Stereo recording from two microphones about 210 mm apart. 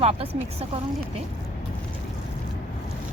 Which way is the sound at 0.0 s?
30° right (ahead or behind).